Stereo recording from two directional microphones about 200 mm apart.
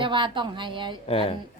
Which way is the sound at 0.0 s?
25° right (ahead or behind).